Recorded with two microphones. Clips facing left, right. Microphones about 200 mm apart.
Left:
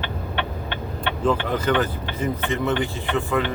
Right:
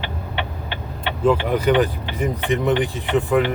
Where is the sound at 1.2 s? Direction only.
10° right (ahead or behind).